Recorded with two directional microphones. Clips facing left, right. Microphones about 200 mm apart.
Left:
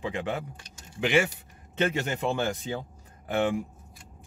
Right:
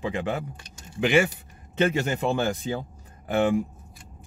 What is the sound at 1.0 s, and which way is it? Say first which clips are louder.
Speech: right 3 dB; 45° right (ahead or behind).